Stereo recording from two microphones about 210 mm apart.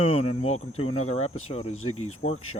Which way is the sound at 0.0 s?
30° left (ahead or behind).